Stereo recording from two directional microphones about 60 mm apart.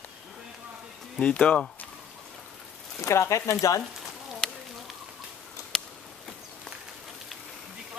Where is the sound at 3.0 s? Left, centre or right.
Left.